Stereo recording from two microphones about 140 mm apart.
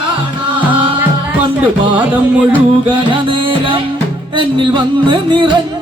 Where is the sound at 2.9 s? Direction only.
35° right (ahead or behind).